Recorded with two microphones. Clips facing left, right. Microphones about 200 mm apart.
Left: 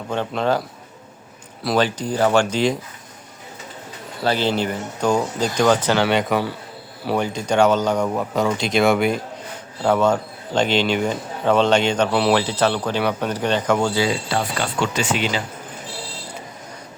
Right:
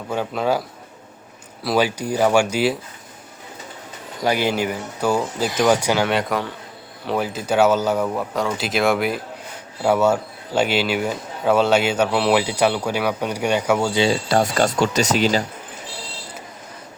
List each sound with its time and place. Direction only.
0.1 s speech: 5° right (ahead or behind)
1.6 s speech: 10° right (ahead or behind)
4.2 s speech: 10° right (ahead or behind)
6.1 s speech: centre (ahead or behind)
8.0 s speech: 5° left (ahead or behind)
14.1 s speech: 45° right (ahead or behind)